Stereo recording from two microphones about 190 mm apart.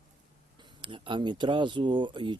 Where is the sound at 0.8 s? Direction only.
25° right (ahead or behind).